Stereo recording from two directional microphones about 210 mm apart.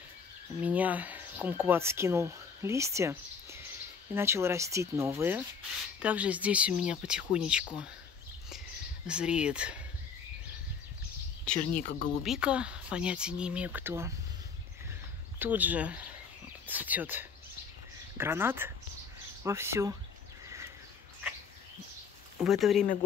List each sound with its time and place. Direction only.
0.6 s speech: 5° right (ahead or behind)
8.5 s a sound: 5° right (ahead or behind)
11.8 s speech: 35° left (ahead or behind)
12.2 s speech: 5° right (ahead or behind)
15.3 s speech: 10° right (ahead or behind)
20.4 s a sound: 15° right (ahead or behind)
22.4 s speech: centre (ahead or behind)